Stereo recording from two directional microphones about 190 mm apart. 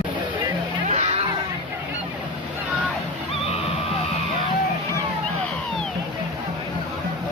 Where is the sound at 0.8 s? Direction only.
35° right (ahead or behind).